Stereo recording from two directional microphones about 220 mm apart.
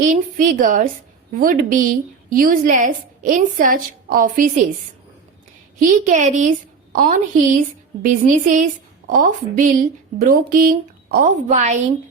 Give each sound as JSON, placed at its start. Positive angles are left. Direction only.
{"t": 0.0, "sound": "a woman's voice", "side_deg": -35}
{"t": 5.8, "sound": "a woman's voice", "side_deg": -35}